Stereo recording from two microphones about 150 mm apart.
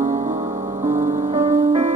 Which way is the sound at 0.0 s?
55° right (ahead or behind).